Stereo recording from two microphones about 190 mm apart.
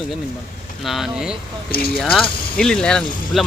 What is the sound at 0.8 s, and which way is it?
Speech, centre (ahead or behind).